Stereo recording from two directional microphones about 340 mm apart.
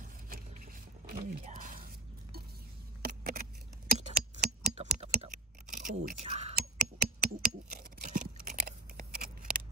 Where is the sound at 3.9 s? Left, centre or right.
Right.